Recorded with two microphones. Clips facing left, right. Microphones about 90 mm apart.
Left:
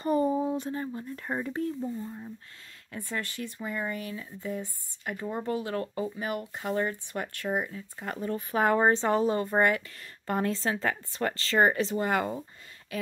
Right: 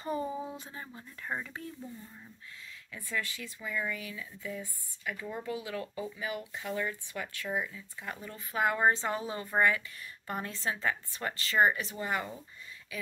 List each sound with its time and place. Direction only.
0.0 s a sound: 55° left (ahead or behind)
0.7 s speech: 45° left (ahead or behind)
2.9 s speech: 55° left (ahead or behind)
8.5 s speech: 35° left (ahead or behind)
9.6 s speech: 55° left (ahead or behind)